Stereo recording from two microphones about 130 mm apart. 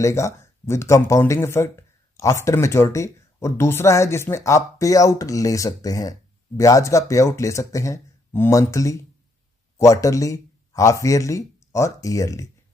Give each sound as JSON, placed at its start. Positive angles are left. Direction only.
{"t": 0.0, "sound": "speech", "side_deg": 20}